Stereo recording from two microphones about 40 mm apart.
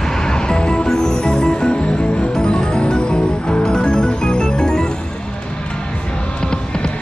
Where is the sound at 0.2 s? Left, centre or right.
Centre.